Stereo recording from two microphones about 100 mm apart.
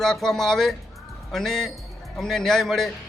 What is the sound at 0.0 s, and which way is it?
Speech, 5° left (ahead or behind).